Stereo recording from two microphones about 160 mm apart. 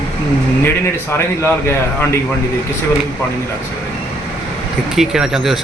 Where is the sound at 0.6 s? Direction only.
15° left (ahead or behind).